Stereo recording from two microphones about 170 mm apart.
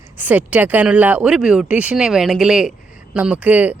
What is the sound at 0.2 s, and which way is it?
Speech, 10° right (ahead or behind).